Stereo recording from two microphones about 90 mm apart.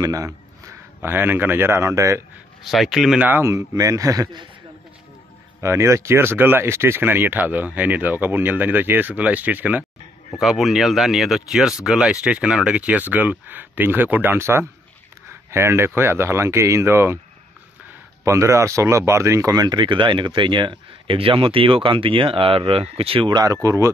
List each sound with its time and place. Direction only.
0.0 s speech: 40° right (ahead or behind)
1.0 s speech: 25° right (ahead or behind)
2.6 s speech: centre (ahead or behind)
3.2 s speech: 20° right (ahead or behind)
3.4 s speech: 40° right (ahead or behind)
5.6 s speech: 30° right (ahead or behind)
10.4 s speech: centre (ahead or behind); by 17.2 s 30° right (ahead or behind)
18.2 s speech: 35° right (ahead or behind); by 23.3 s 90° right
23.3 s speech: 40° right (ahead or behind)